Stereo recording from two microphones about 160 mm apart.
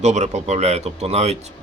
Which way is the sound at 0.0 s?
45° right (ahead or behind).